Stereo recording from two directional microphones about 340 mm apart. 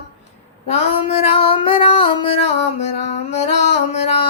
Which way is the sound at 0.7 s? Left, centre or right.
Centre.